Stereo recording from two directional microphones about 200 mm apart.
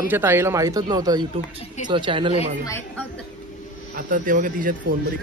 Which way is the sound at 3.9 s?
40° right (ahead or behind).